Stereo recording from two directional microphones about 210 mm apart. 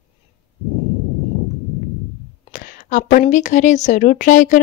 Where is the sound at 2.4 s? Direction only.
40° left (ahead or behind).